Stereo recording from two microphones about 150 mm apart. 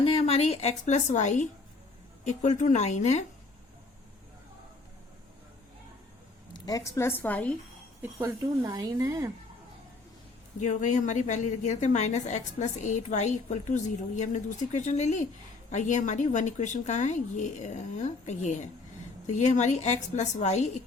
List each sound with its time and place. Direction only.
0.0 s a woman's voice: 40° left (ahead or behind)
6.5 s a woman's voice: 25° left (ahead or behind)
8.2 s a woman's voice: 25° right (ahead or behind)
10.6 s a woman's voice: 55° left (ahead or behind)